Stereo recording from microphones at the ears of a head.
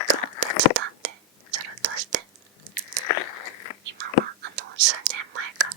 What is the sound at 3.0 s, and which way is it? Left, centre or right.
Biting, left.